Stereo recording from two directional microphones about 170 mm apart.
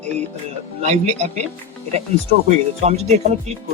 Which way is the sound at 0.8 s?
40° right (ahead or behind).